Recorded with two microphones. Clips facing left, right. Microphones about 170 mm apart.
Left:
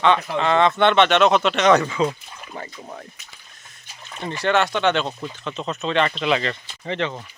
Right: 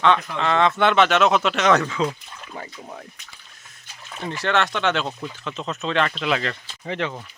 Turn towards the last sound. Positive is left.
turn(degrees=-5)  # may be behind; listen again after turning